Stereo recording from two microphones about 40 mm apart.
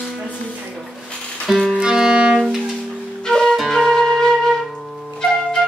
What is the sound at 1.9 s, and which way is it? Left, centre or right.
Music, right.